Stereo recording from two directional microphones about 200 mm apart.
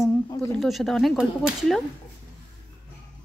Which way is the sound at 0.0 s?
15° left (ahead or behind).